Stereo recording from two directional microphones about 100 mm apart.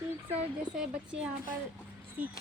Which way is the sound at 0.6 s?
10° right (ahead or behind).